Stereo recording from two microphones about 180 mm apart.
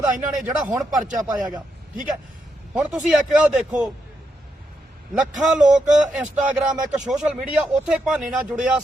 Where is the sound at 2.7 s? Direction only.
Centre (ahead or behind).